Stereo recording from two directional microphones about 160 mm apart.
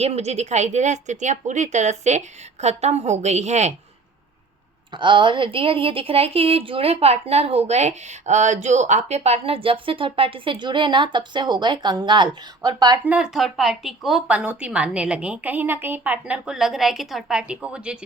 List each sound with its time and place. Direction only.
0.0 s speech: 40° right (ahead or behind)
4.9 s a woman's voice: 30° right (ahead or behind)
13.1 s speech: 5° right (ahead or behind)